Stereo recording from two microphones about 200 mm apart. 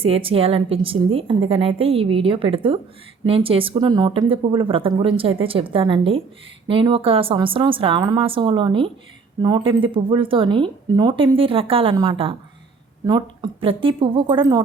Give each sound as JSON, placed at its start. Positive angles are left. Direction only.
{"t": 0.0, "sound": "a woman's voice", "side_deg": -25}